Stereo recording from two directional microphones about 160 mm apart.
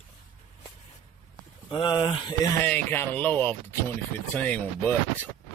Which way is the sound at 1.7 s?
30° left (ahead or behind).